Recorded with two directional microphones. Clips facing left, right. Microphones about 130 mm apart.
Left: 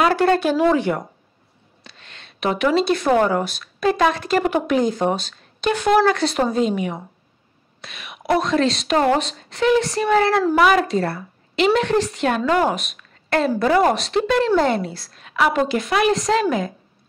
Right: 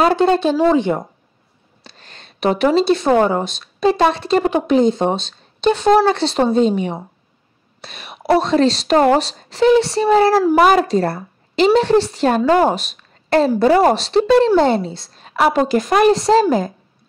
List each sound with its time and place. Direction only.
0.0 s speech: 20° right (ahead or behind)
1.8 s a woman's voice: 35° right (ahead or behind)